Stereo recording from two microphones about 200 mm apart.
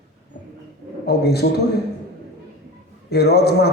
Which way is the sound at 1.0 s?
55° left (ahead or behind).